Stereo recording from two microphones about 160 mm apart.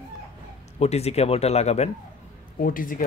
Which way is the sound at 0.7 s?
40° left (ahead or behind).